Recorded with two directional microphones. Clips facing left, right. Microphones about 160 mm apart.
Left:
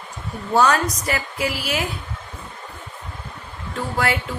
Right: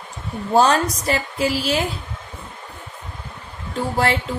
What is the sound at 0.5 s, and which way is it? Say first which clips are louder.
A woman's voice: right 2 dB; 30° right (ahead or behind).